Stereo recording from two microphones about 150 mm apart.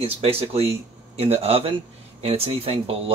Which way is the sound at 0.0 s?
40° right (ahead or behind).